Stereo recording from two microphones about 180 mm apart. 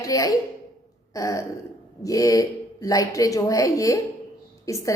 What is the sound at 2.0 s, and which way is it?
A woman's voice, 20° left (ahead or behind).